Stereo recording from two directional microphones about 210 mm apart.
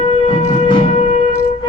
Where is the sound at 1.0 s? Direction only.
25° left (ahead or behind).